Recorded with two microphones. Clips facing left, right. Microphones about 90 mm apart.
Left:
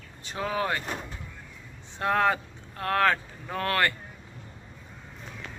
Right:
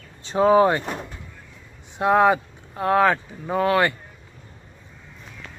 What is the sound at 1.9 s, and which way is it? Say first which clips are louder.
Speech: right 7 dB; 15° right (ahead or behind).